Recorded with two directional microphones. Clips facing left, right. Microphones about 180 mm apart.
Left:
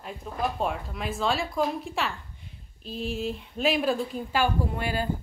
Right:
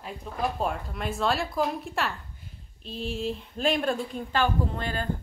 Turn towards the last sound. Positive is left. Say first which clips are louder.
# left 2 dB
turn(degrees=10)  # may be behind; listen again after turning